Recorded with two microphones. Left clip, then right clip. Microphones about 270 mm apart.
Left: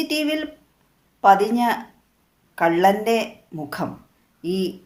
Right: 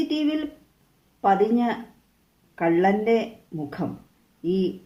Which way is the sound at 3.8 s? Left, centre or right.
Left.